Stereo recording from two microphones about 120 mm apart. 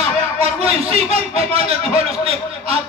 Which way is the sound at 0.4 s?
60° right (ahead or behind).